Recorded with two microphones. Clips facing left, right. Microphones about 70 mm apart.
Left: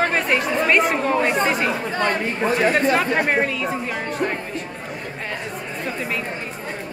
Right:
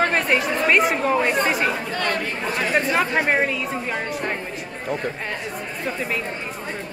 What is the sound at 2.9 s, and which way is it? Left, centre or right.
Speech, centre.